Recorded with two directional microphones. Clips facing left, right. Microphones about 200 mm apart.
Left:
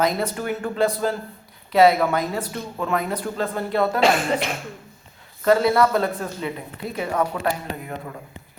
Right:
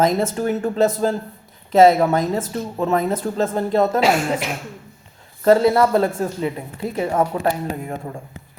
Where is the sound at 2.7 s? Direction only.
25° right (ahead or behind).